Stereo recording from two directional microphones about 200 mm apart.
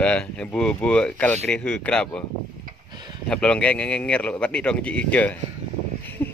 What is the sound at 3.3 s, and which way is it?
Speech, 5° left (ahead or behind).